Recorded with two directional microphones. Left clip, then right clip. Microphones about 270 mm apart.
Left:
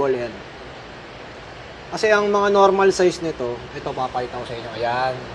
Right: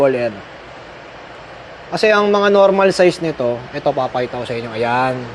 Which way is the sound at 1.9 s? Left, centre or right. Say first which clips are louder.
Right 4 dB; right.